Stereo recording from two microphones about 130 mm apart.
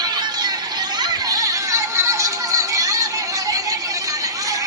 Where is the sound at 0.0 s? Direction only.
35° right (ahead or behind).